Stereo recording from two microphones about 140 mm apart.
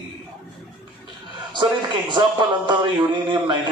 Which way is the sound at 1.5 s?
35° right (ahead or behind).